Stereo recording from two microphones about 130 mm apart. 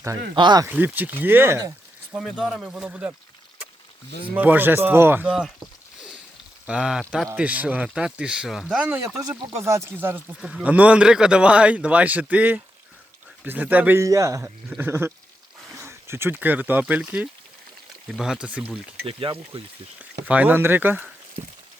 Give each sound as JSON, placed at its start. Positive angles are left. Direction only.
{"t": 0.3, "sound": "speech", "side_deg": -35}
{"t": 0.7, "sound": "speech", "side_deg": -10}
{"t": 2.1, "sound": "speech", "side_deg": 0}
{"t": 4.4, "sound": "speech", "side_deg": -15}
{"t": 6.7, "sound": "speech", "side_deg": -5}
{"t": 9.0, "sound": "speech", "side_deg": -25}
{"t": 14.0, "sound": "speech", "side_deg": -25}
{"t": 19.0, "sound": "speech", "side_deg": -40}
{"t": 20.0, "sound": "speech", "side_deg": -10}